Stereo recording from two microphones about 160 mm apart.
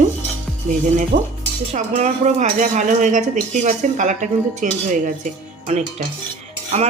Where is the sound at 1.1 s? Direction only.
60° right (ahead or behind).